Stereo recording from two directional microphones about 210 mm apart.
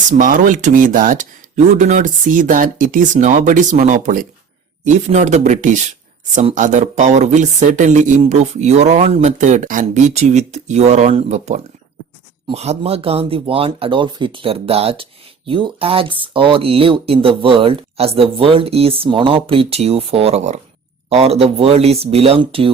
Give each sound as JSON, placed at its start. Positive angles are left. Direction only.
{"t": 0.1, "sound": "speech", "side_deg": -40}